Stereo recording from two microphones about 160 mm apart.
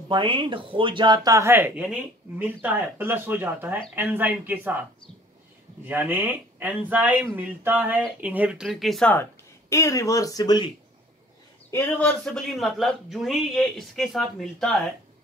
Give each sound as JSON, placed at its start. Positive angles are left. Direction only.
{"t": 0.1, "sound": "speech", "side_deg": -30}
{"t": 5.9, "sound": "speech", "side_deg": -10}
{"t": 9.1, "sound": "speech", "side_deg": 15}
{"t": 11.7, "sound": "speech", "side_deg": 15}
{"t": 12.3, "sound": "speech", "side_deg": 0}